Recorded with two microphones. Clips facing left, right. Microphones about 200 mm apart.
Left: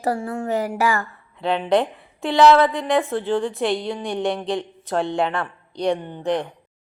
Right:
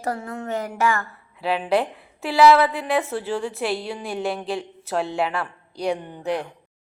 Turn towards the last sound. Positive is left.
turn(degrees=-5)  # may be behind; listen again after turning